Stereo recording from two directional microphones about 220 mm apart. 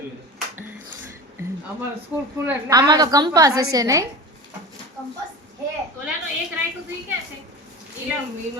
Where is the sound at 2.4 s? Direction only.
15° right (ahead or behind).